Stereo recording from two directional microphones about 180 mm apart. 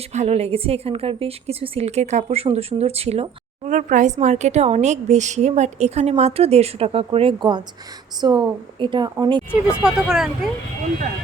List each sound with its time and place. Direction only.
0.1 s a woman's voice: 35° right (ahead or behind); by 9.4 s 20° right (ahead or behind)
9.8 s speech: centre (ahead or behind)